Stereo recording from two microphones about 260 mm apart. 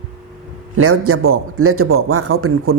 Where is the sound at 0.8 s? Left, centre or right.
Right.